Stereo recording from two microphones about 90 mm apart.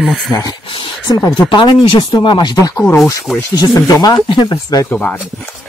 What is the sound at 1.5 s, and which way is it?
Speech, 65° left (ahead or behind).